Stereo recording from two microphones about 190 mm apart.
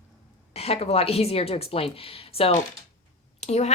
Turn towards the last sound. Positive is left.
turn(degrees=35)  # may be behind; listen again after turning